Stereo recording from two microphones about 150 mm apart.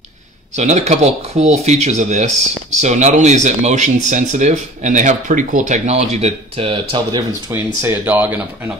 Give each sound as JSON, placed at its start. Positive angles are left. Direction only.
{"t": 0.6, "sound": "speech", "side_deg": -50}
{"t": 7.5, "sound": "speech", "side_deg": -15}